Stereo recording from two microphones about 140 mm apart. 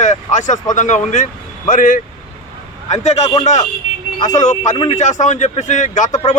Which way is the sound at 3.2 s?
25° left (ahead or behind).